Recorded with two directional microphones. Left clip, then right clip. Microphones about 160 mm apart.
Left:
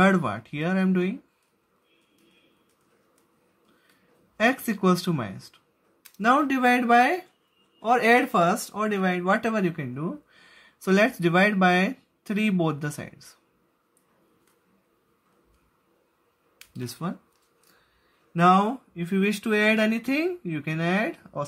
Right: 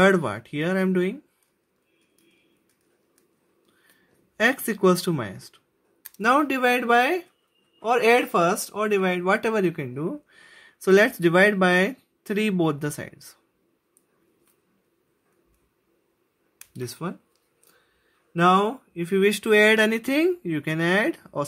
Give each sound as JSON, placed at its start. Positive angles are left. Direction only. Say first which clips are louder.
{"t": 0.0, "sound": "speech", "louder": "right 3 dB", "side_deg": -25}
{"t": 4.4, "sound": "speech", "louder": "right 2 dB", "side_deg": -25}
{"t": 16.7, "sound": "speech", "louder": "right 2 dB", "side_deg": -25}
{"t": 18.3, "sound": "speech", "louder": "even", "side_deg": -30}